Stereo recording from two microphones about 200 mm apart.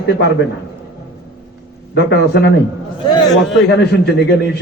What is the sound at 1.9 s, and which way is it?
Speech, 55° left (ahead or behind).